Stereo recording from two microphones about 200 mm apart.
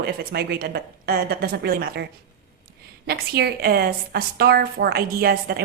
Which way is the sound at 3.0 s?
55° right (ahead or behind).